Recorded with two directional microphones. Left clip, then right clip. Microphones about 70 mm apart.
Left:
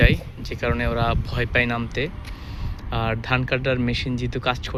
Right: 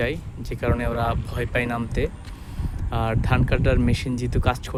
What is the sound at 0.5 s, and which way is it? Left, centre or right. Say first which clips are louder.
Speech: left 1 dB; right.